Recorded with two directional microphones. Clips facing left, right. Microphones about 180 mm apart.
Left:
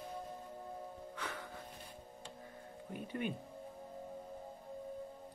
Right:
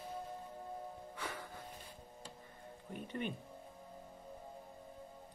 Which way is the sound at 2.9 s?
5° left (ahead or behind).